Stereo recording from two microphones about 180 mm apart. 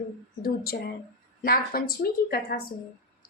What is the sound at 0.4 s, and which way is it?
A woman's voice, 55° left (ahead or behind).